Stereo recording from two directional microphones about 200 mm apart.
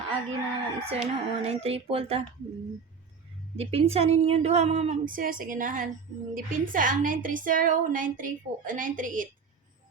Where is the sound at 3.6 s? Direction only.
30° right (ahead or behind).